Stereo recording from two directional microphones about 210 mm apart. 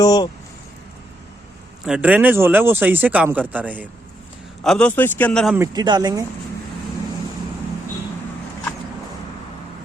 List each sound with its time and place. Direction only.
0.0 s speech: 20° left (ahead or behind)
1.8 s speech: 5° right (ahead or behind)
4.6 s a man's voice: 5° left (ahead or behind)
5.5 s a man's voice: 20° right (ahead or behind)